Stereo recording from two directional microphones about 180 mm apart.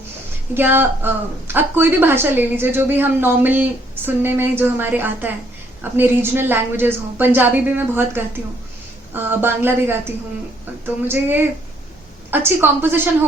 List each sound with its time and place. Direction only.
0.5 s a woman's voice: 10° right (ahead or behind)